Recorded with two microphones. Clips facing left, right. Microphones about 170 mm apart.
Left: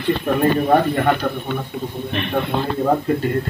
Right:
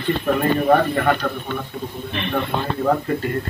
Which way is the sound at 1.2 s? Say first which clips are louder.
Left 2 dB; 15° left (ahead or behind).